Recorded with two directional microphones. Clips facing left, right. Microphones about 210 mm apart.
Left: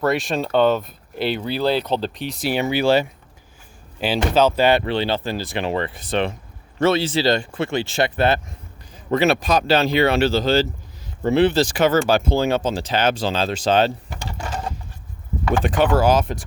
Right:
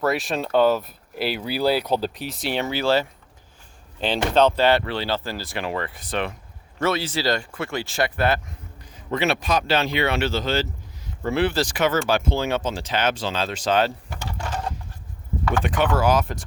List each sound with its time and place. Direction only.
0.0 s speech: 5° right (ahead or behind); by 3.1 s 15° left (ahead or behind)
4.0 s speech: 5° left (ahead or behind); by 8.5 s 25° left (ahead or behind)
9.0 s speech: 40° left (ahead or behind)
15.5 s speech: 35° left (ahead or behind)